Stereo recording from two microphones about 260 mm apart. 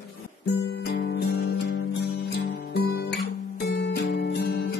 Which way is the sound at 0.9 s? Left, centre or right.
Left.